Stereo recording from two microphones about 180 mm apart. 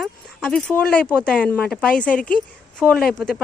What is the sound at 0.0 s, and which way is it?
A woman's voice, centre (ahead or behind).